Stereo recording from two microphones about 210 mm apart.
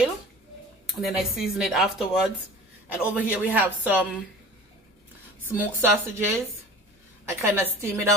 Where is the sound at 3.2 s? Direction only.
10° right (ahead or behind).